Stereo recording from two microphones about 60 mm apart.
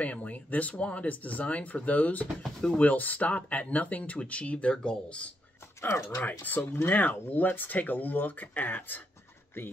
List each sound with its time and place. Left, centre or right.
0.0 s speech: left
5.8 s speech: left
6.0 s speech: left
6.6 s speech: left
6.9 s speech: left